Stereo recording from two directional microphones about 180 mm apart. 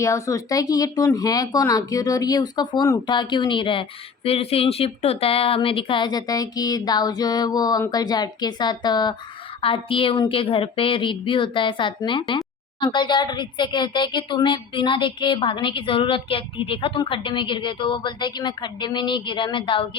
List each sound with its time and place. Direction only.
0.0 s speech: 15° left (ahead or behind)